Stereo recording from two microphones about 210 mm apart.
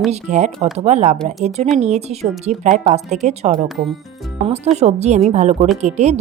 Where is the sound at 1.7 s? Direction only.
30° right (ahead or behind).